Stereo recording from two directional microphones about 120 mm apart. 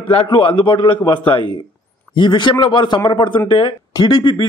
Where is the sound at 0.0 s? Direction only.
50° left (ahead or behind).